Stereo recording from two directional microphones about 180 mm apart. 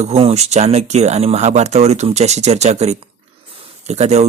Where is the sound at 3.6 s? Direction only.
40° right (ahead or behind).